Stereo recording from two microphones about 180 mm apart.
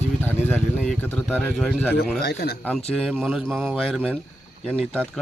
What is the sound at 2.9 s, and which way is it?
Speech, centre (ahead or behind).